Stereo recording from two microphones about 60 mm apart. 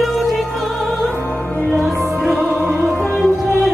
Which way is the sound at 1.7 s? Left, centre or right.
Centre.